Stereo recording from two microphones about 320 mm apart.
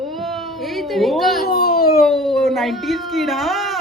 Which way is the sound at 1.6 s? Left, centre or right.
Left.